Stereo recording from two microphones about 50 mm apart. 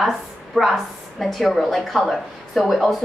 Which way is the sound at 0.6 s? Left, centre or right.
Centre.